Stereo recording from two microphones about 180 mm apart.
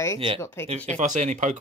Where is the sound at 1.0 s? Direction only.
40° right (ahead or behind).